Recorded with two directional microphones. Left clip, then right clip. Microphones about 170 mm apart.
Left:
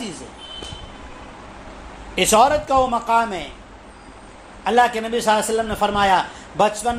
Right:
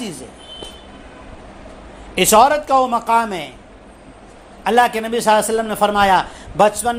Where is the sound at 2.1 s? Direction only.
40° right (ahead or behind).